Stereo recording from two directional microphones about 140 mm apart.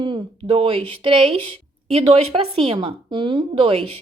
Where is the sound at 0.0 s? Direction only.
35° right (ahead or behind).